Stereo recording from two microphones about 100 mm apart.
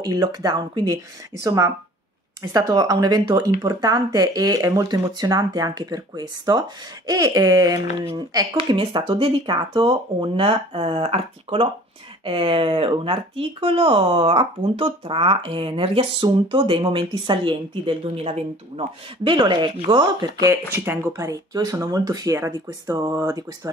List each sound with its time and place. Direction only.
0.0 s speech: 40° right (ahead or behind)
10.3 s speech: 65° right (ahead or behind)
16.3 s speech: 55° right (ahead or behind)
18.1 s speech: 90° right
19.2 s speech: 50° right (ahead or behind)
20.4 s speech: 25° right (ahead or behind)